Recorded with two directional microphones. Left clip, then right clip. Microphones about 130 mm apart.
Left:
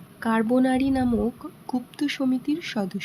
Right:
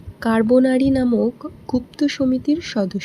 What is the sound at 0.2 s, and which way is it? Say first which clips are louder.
A woman's voice: right 7 dB; 30° right (ahead or behind).